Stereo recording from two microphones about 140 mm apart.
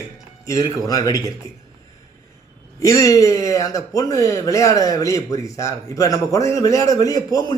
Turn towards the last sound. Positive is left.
turn(degrees=25)  # may be behind; listen again after turning